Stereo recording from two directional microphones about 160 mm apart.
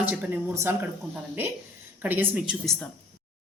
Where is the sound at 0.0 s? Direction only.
10° right (ahead or behind).